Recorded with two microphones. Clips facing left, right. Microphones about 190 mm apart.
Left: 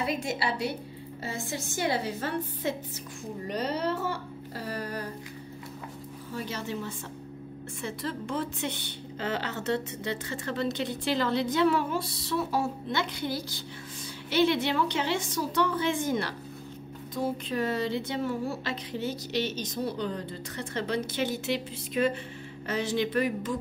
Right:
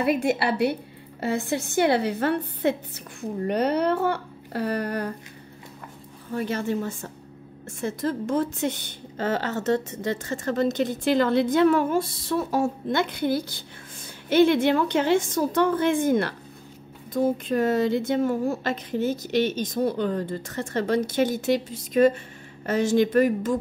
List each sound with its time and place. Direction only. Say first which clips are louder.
0.0 s speech: right 8 dB; 60° right (ahead or behind)
6.3 s a woman's voice: right 8 dB; 55° right (ahead or behind)